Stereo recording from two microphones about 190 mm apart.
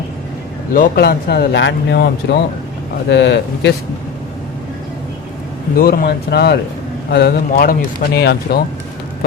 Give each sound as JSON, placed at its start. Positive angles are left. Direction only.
{"t": 0.7, "sound": "speech", "side_deg": 50}
{"t": 3.1, "sound": "speech", "side_deg": 65}
{"t": 5.7, "sound": "speech", "side_deg": 50}
{"t": 8.1, "sound": "speech", "side_deg": 60}